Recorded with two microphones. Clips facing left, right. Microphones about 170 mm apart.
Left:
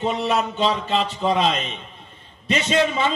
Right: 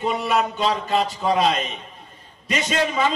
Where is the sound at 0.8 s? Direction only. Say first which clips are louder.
Even; 40° right (ahead or behind).